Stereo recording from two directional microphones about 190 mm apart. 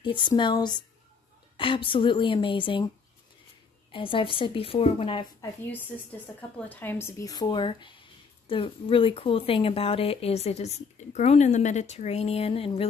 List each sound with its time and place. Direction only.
0.0 s speech: 25° left (ahead or behind)
3.9 s speech: 25° left (ahead or behind)
6.7 s speech: 10° left (ahead or behind); by 12.8 s 30° left (ahead or behind)